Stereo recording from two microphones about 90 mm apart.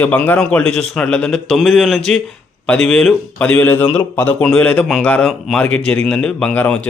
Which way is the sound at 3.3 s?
15° left (ahead or behind).